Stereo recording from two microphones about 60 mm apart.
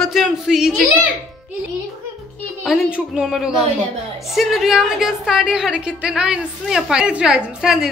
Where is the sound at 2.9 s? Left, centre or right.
Centre.